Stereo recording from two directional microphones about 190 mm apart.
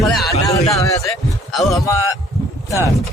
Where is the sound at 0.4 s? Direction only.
15° left (ahead or behind).